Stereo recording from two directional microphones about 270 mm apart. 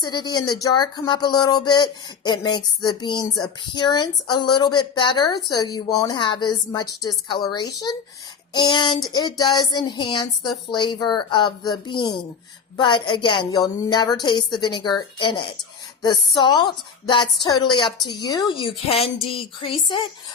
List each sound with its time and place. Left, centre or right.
0.0 s speech: centre